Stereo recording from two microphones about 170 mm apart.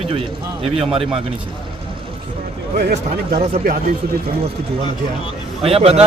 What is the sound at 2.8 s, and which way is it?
Speech, 70° right (ahead or behind).